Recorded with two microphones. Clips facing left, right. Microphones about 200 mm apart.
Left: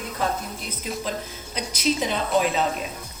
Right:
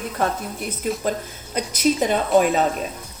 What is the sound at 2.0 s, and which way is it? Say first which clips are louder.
Speech: right 7 dB; 50° right (ahead or behind).